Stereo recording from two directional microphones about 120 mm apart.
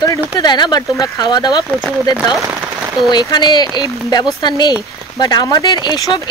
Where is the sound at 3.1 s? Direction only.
35° left (ahead or behind).